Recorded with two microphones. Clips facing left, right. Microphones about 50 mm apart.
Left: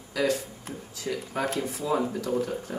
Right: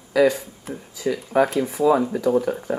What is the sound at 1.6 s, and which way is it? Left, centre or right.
Speech, centre.